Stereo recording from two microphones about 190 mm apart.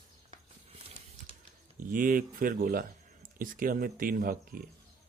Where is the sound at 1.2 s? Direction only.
40° right (ahead or behind).